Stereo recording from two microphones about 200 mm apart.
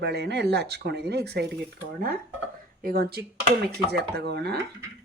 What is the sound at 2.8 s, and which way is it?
Speech, 50° right (ahead or behind).